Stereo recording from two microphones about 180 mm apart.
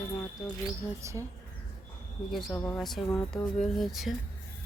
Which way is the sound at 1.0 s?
15° right (ahead or behind).